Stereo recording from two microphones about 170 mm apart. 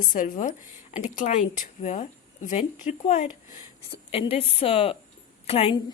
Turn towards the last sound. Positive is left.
turn(degrees=30)  # may be behind; listen again after turning